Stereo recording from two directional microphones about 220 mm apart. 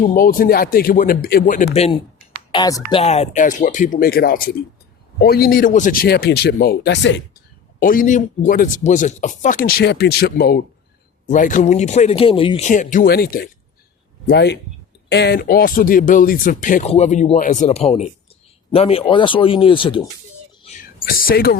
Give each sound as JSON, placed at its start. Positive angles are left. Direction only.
{"t": 0.0, "sound": "speech", "side_deg": 40}
{"t": 2.5, "sound": "speech", "side_deg": 20}
{"t": 3.0, "sound": "speech", "side_deg": 30}
{"t": 7.8, "sound": "speech", "side_deg": 40}
{"t": 20.7, "sound": "speech", "side_deg": 40}